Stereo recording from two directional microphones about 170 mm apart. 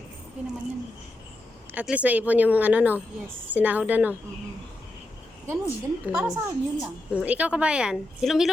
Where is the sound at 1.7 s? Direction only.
10° right (ahead or behind).